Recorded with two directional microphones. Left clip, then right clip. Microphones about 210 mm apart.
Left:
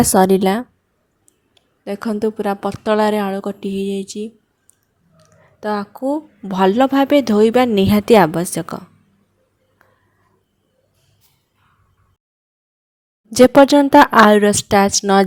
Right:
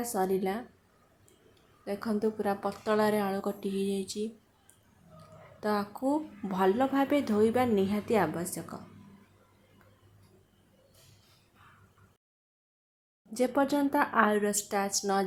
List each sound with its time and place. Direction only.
0.0 s speech: 50° left (ahead or behind)
1.8 s speech: 35° left (ahead or behind)
13.3 s speech: 50° left (ahead or behind)